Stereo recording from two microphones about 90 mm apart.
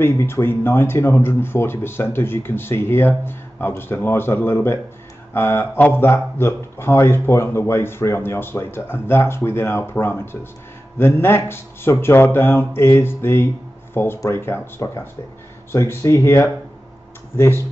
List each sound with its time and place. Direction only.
0.0 s speech: 25° left (ahead or behind)